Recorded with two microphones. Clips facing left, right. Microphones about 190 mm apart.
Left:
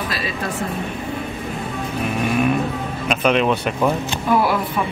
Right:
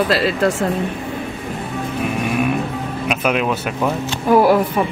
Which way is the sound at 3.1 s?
5° right (ahead or behind).